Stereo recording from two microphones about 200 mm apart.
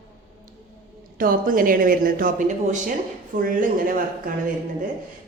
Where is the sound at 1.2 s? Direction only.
45° right (ahead or behind).